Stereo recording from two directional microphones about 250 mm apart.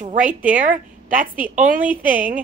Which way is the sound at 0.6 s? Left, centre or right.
Right.